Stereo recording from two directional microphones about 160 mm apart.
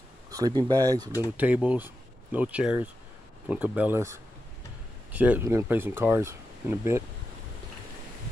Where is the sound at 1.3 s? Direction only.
10° right (ahead or behind).